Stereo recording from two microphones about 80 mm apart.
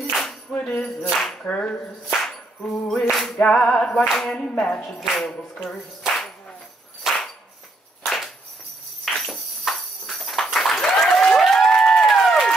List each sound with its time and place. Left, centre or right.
0.1 s music: centre
0.5 s music: centre
1.4 s clapping: centre
3.4 s clapping: centre
5.3 s music: centre
7.0 s a sound: centre